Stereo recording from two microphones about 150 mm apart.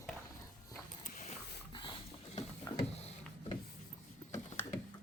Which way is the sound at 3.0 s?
45° left (ahead or behind).